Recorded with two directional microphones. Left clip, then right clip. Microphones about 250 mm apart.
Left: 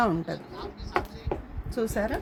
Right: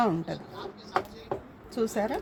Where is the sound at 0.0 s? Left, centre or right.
Centre.